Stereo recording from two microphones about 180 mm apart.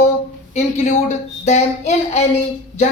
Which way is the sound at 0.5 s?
40° left (ahead or behind).